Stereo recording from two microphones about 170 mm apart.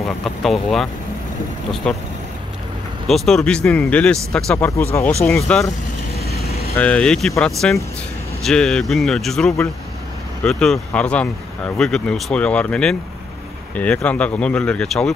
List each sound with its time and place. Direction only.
0.0 s speech: centre (ahead or behind)
1.8 s speech: 5° left (ahead or behind)
3.1 s speech: centre (ahead or behind)
6.1 s vehicle: 35° right (ahead or behind)
6.8 s speech: 5° left (ahead or behind)